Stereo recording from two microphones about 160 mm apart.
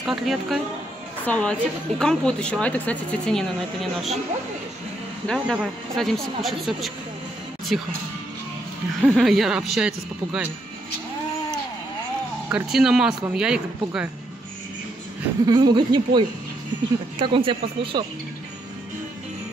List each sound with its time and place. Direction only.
0.0 s a woman's voice: centre (ahead or behind)
5.2 s speech: 5° left (ahead or behind)
9.1 s speech: centre (ahead or behind)
12.4 s speech: 5° right (ahead or behind)
15.4 s speech: 25° right (ahead or behind)